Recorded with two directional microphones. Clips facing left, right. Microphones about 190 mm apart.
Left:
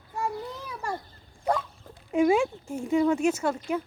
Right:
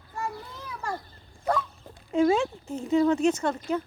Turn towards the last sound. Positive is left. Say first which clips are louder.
# even
turn(degrees=10)  # may be behind; listen again after turning